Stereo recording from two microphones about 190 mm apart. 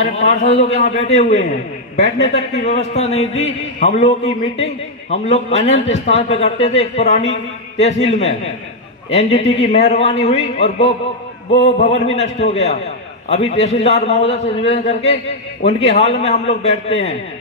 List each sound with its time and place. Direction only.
0.0 s a man's voice: 35° left (ahead or behind)